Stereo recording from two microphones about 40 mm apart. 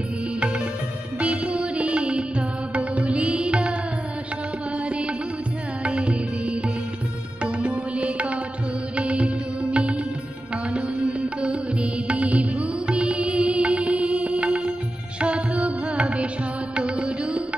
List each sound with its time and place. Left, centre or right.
1.2 s music: right
4.8 s music: right